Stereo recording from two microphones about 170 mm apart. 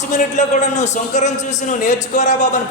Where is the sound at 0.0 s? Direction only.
45° left (ahead or behind).